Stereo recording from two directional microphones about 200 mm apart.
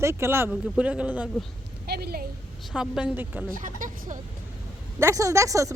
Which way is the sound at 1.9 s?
50° right (ahead or behind).